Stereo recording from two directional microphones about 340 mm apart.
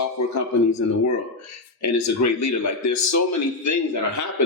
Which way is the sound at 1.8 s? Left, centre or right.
Left.